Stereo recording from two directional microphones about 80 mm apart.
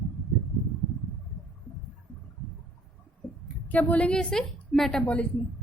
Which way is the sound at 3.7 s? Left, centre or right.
Centre.